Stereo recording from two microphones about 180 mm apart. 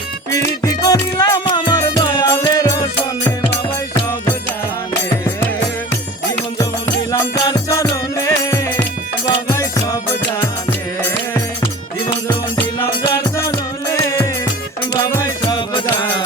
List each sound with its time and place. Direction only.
0.6 s music: 20° left (ahead or behind)
6.6 s music: 20° left (ahead or behind)
14.9 s music: 20° left (ahead or behind)
15.4 s music: 30° left (ahead or behind)